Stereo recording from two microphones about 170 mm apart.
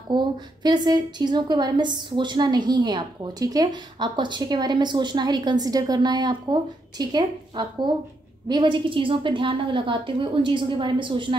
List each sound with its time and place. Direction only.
0.1 s a woman's voice: 25° right (ahead or behind)